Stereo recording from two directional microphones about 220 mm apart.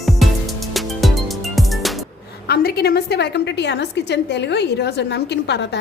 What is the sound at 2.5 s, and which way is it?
A woman's voice, 45° left (ahead or behind).